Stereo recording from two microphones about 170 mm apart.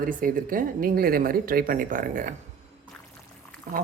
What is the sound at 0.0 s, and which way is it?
Speech, 55° right (ahead or behind).